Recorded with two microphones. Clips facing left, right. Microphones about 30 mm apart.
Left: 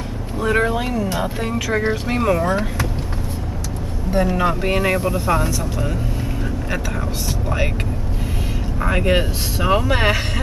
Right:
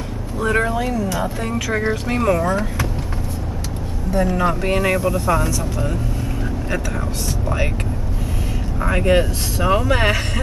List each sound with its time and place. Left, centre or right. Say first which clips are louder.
0.4 s speech: left 1 dB; centre
0.7 s speech: right 1 dB; left
1.5 s speech: left 1 dB; centre
2.4 s speech: even; left
4.1 s speech: even; left
7.4 s speech: even; centre
8.8 s speech: right 2 dB; centre